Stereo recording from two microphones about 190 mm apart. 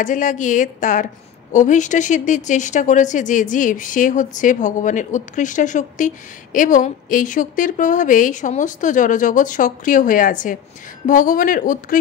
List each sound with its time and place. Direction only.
0.0 s a woman's voice: 40° left (ahead or behind)